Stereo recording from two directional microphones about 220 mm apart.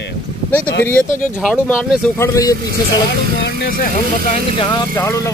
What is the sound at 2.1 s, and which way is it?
Speech, 15° left (ahead or behind).